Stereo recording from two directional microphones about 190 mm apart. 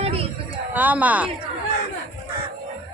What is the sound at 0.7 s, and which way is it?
Speech, 10° right (ahead or behind).